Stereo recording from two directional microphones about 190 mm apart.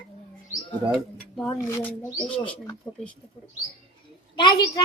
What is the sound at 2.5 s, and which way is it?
Speech, 5° left (ahead or behind).